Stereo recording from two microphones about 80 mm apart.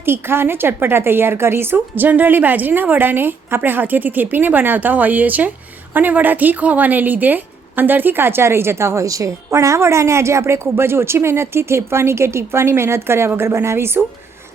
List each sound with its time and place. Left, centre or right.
0.0 s a woman's voice: right